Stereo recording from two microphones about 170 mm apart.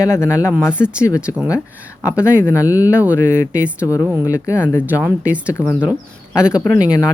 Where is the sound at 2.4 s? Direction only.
20° left (ahead or behind).